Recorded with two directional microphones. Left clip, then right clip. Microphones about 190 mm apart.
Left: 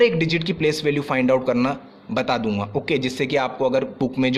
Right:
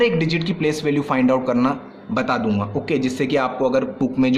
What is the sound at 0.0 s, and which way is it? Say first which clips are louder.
A man's voice: left 1 dB; 30° left (ahead or behind).